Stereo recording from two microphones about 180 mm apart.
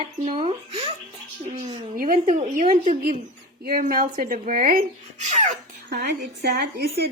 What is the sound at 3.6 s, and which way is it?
Speech, 55° right (ahead or behind).